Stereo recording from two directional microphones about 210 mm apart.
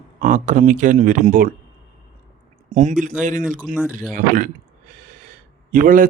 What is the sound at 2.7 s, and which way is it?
Speech, 35° right (ahead or behind).